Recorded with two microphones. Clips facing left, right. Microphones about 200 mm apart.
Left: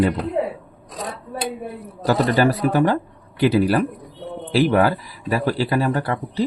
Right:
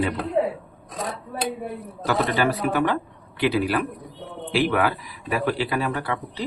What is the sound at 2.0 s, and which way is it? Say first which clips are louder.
Speech: left 5 dB; 35° left (ahead or behind).